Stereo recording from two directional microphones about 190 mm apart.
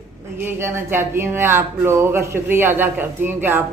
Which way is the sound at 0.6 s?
10° right (ahead or behind).